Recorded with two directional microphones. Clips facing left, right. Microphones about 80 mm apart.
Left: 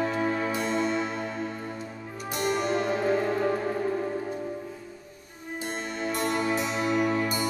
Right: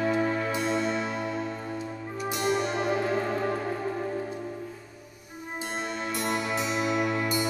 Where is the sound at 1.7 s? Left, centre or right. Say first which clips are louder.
Right 3 dB; centre.